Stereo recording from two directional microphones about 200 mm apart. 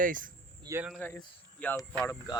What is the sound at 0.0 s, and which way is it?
Speech, 40° right (ahead or behind).